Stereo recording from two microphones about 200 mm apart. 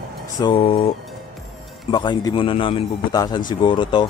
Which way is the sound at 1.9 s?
20° left (ahead or behind).